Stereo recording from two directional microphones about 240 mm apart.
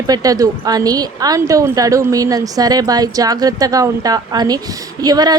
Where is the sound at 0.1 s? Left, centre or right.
Centre.